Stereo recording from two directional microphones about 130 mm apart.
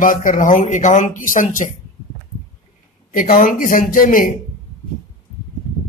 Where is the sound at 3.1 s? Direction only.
90° left.